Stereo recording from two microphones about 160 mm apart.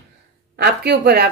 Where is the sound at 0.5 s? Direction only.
90° right.